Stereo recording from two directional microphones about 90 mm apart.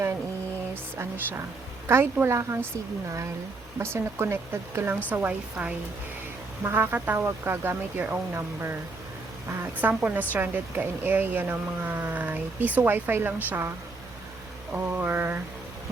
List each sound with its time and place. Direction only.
0.7 s a sound: 25° right (ahead or behind)
2.1 s a woman's voice: 30° right (ahead or behind)
3.8 s a woman's voice: 30° right (ahead or behind)
5.0 s a woman's voice: 15° right (ahead or behind)